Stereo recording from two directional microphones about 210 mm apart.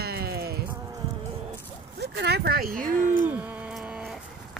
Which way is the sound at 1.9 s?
55° right (ahead or behind).